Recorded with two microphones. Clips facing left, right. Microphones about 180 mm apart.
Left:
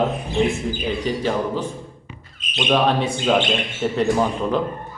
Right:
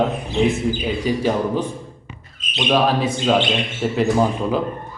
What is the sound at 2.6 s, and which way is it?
A man's voice, 5° right (ahead or behind).